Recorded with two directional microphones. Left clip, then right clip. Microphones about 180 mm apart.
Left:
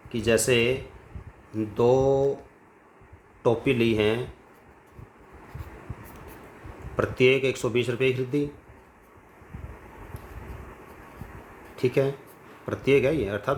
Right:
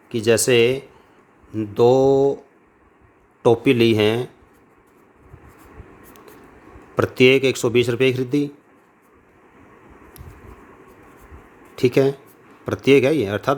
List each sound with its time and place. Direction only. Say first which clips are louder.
0.1 s speech: right 6 dB; 55° right (ahead or behind)
3.4 s speech: right 7 dB; 55° right (ahead or behind)
6.9 s speech: right 6 dB; 55° right (ahead or behind)
11.8 s speech: right 7 dB; 55° right (ahead or behind)